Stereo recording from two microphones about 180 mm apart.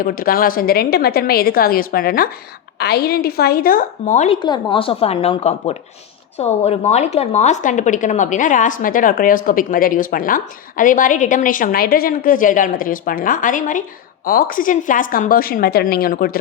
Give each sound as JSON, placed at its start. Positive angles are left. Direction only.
{"t": 0.0, "sound": "a woman's voice", "side_deg": 55}
{"t": 4.4, "sound": "a woman's voice", "side_deg": 25}